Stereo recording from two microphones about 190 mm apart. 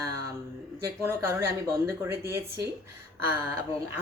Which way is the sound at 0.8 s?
15° right (ahead or behind).